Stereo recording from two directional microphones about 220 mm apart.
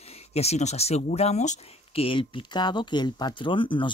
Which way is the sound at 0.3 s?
30° left (ahead or behind).